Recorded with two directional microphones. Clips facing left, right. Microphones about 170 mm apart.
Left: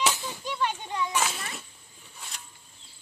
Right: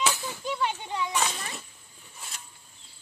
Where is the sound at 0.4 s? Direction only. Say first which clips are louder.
Right 1 dB; 10° right (ahead or behind).